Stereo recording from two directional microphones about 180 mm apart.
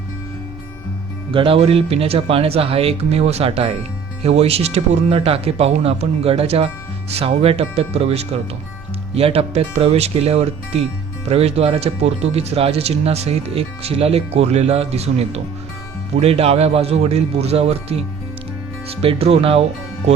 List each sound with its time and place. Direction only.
1.3 s speech: 30° right (ahead or behind)